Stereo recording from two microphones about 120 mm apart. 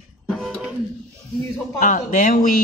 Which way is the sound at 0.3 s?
Centre (ahead or behind).